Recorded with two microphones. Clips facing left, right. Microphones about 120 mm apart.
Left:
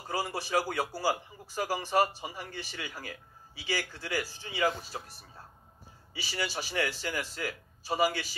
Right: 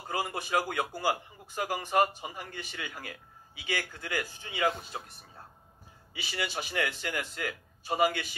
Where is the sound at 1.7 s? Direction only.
55° right (ahead or behind).